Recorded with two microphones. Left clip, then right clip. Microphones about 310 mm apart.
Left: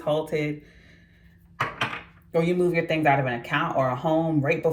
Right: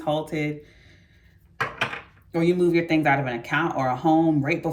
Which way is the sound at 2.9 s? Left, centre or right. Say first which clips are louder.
Even; centre.